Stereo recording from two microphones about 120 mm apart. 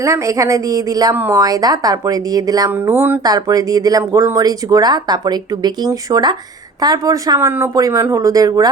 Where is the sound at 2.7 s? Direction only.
15° right (ahead or behind).